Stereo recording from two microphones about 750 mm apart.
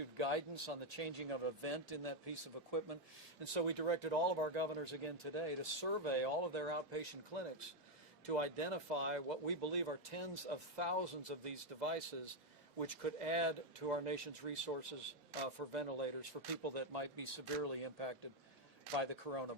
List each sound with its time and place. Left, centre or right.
0.2 s speech: right